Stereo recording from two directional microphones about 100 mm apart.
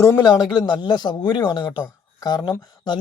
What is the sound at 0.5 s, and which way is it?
Speech, 50° left (ahead or behind).